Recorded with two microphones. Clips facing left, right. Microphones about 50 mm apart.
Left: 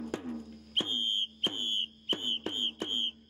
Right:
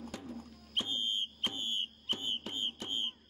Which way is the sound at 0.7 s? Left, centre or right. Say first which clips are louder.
Left 3 dB; left.